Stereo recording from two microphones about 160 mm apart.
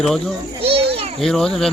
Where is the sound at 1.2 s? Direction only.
5° left (ahead or behind).